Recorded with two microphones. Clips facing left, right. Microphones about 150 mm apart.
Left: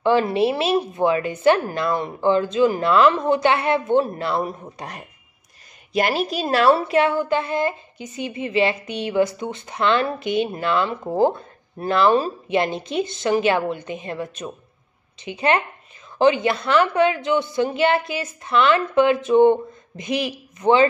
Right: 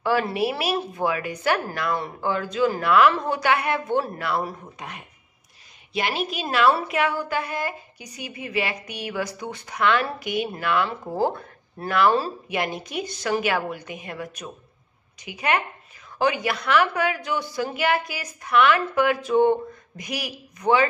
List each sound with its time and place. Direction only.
0.0 s a woman's voice: 25° left (ahead or behind)
4.7 s a woman's voice: 40° left (ahead or behind)